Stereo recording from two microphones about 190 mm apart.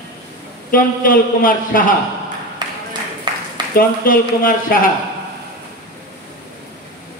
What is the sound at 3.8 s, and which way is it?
A man's voice, 45° left (ahead or behind).